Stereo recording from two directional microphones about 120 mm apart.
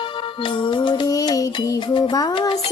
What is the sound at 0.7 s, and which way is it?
Music, 40° left (ahead or behind).